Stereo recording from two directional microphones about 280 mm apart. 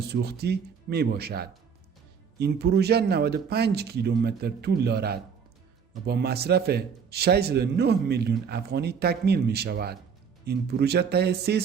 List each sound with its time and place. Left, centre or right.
0.1 s a man's voice: right